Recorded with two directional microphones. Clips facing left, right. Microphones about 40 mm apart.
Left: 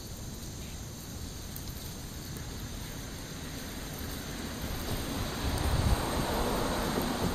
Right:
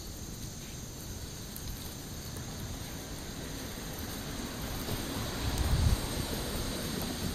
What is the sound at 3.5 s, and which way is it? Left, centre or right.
Vehicle, centre.